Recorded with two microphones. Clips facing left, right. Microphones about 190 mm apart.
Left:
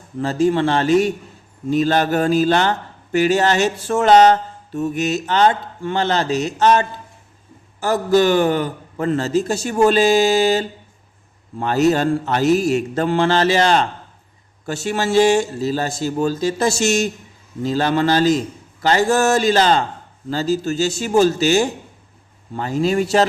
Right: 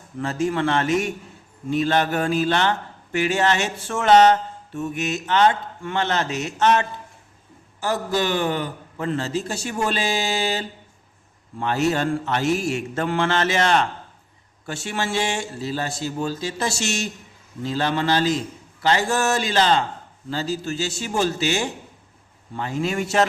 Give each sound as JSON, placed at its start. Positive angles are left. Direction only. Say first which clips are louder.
{"t": 0.2, "sound": "a man's voice", "louder": "left 6 dB", "side_deg": 35}
{"t": 7.8, "sound": "a man's voice", "louder": "left 8 dB", "side_deg": 45}